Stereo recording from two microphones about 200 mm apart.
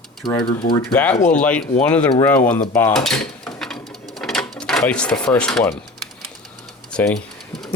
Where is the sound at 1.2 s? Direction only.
5° left (ahead or behind).